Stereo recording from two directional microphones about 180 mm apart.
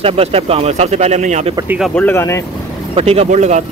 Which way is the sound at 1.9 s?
15° left (ahead or behind).